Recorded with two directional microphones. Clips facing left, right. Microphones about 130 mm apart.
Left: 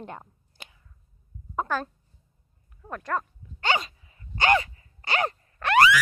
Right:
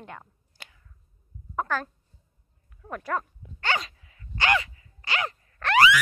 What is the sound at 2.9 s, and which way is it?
Speech, 5° right (ahead or behind).